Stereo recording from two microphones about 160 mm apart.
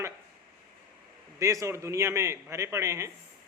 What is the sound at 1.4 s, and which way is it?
A man's voice, 20° right (ahead or behind).